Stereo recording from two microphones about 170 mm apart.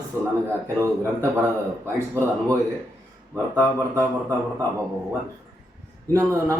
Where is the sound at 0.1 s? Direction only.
15° right (ahead or behind).